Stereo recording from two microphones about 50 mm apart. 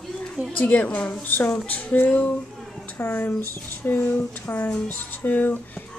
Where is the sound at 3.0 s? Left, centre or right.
Left.